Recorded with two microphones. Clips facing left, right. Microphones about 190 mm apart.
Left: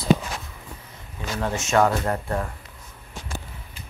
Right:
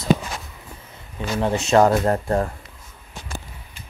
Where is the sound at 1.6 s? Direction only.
40° right (ahead or behind).